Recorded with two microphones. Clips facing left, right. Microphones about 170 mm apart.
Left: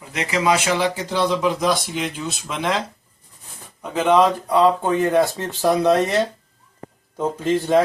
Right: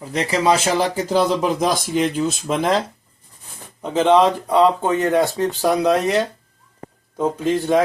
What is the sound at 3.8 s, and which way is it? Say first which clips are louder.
Speech: right 2 dB; 25° right (ahead or behind).